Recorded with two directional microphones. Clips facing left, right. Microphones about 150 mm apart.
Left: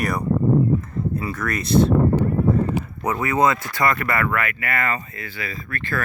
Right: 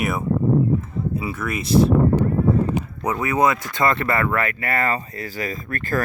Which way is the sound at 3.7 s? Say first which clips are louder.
Right 1 dB; 25° right (ahead or behind).